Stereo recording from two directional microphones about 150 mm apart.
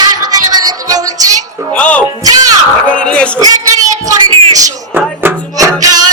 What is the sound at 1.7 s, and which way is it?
Music, 10° left (ahead or behind).